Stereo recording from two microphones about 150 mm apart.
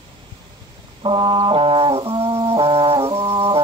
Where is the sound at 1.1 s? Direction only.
30° right (ahead or behind).